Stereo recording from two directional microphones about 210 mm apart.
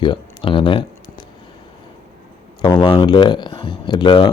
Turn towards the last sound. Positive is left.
turn(degrees=20)  # may be behind; listen again after turning